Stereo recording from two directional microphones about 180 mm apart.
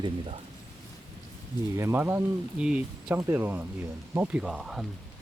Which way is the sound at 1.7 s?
15° right (ahead or behind).